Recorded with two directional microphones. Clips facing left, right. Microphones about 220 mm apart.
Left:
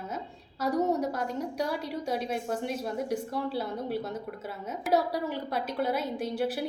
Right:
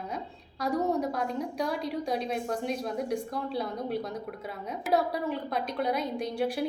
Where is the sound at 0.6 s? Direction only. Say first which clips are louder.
Left 1 dB; 5° left (ahead or behind).